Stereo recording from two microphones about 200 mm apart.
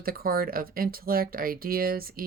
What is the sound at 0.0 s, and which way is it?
Speech, 45° right (ahead or behind).